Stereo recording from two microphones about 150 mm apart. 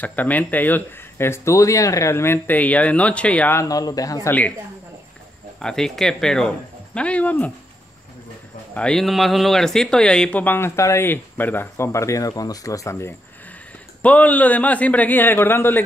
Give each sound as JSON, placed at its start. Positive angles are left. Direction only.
{"t": 0.0, "sound": "speech", "side_deg": 10}
{"t": 3.6, "sound": "speech", "side_deg": 25}
{"t": 4.3, "sound": "speech", "side_deg": 10}
{"t": 5.6, "sound": "speech", "side_deg": 5}
{"t": 8.7, "sound": "speech", "side_deg": 5}
{"t": 14.0, "sound": "speech", "side_deg": 10}